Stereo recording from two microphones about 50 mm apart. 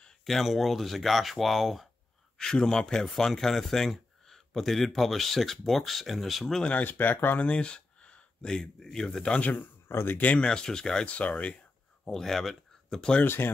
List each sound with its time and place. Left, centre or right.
0.2 s speech: centre
2.3 s speech: centre
6.8 s speech: left
7.3 s speech: left
9.4 s speech: left
9.8 s speech: left
10.1 s speech: left
10.4 s speech: centre
11.1 s speech: left
12.0 s speech: centre
13.2 s speech: left